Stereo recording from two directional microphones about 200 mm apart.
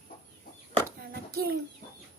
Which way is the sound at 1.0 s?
50° right (ahead or behind).